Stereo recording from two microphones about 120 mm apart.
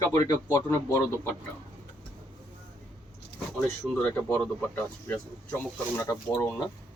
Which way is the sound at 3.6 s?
5° left (ahead or behind).